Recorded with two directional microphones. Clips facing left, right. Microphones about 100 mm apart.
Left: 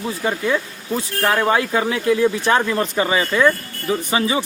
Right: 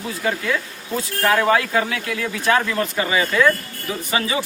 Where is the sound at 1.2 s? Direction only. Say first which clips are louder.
Right 1 dB; 25° left (ahead or behind).